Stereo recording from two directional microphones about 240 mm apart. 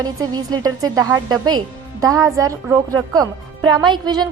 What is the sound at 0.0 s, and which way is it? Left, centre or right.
Speech, centre.